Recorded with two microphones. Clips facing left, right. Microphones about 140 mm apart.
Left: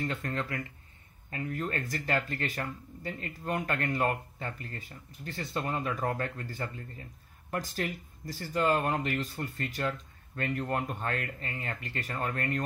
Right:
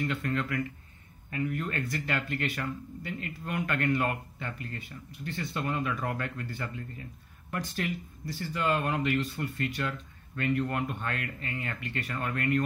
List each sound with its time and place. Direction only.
0.0 s speech: 35° left (ahead or behind)